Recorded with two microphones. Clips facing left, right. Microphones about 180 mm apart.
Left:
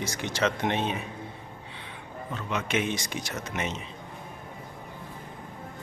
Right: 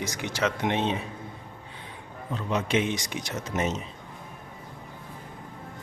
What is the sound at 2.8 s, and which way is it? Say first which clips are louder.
Speech: right 1 dB; 20° right (ahead or behind).